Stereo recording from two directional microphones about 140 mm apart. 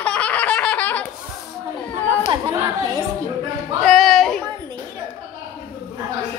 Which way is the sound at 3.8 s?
Centre (ahead or behind).